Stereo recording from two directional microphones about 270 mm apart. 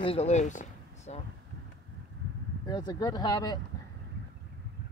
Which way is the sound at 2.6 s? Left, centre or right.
Centre.